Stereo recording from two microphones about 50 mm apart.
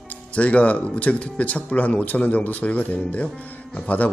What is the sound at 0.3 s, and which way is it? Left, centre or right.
Speech, left.